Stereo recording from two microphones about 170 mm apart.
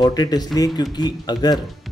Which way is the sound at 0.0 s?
20° left (ahead or behind).